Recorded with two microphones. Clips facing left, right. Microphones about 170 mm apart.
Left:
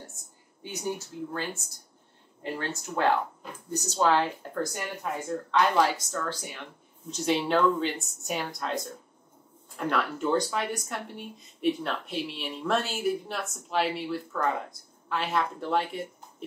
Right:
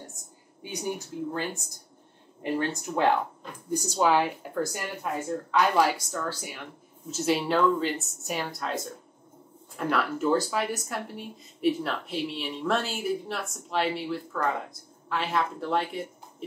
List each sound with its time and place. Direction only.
0.6 s a woman's voice: 15° right (ahead or behind)